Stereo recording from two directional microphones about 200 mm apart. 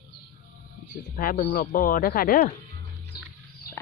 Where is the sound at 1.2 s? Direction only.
45° left (ahead or behind).